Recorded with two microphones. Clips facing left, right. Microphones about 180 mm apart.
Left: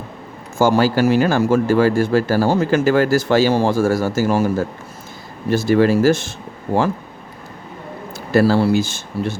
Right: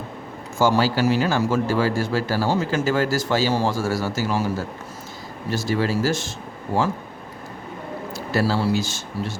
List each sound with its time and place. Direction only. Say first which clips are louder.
0.6 s speech: left 4 dB; 50° left (ahead or behind)
8.1 s speech: left 8 dB; 55° left (ahead or behind)